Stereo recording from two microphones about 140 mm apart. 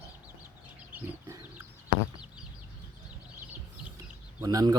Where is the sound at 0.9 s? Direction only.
15° right (ahead or behind).